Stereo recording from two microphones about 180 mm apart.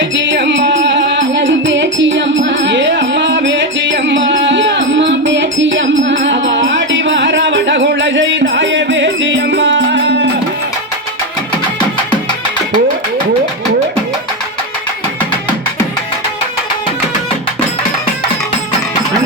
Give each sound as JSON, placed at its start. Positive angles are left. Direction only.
{"t": 0.1, "sound": "music", "side_deg": -85}